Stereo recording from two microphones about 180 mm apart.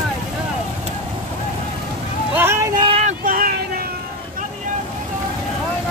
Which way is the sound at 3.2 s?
50° right (ahead or behind).